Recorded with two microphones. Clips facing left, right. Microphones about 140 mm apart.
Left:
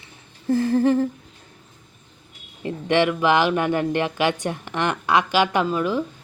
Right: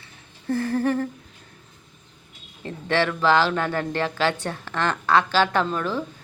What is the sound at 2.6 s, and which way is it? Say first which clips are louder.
Speech: left 4 dB; 15° left (ahead or behind).